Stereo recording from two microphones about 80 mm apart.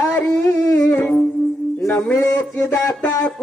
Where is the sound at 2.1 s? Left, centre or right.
Left.